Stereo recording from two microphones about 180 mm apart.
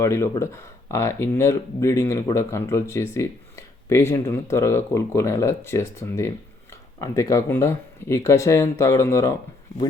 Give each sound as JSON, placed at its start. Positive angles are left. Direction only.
{"t": 0.0, "sound": "speech", "side_deg": 15}